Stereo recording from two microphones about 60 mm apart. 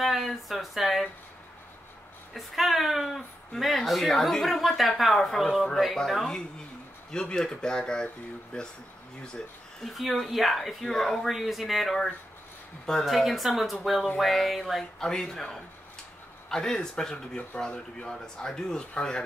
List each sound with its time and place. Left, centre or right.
0.0 s speech: centre
2.3 s speech: centre
9.9 s speech: centre
14.8 s speech: centre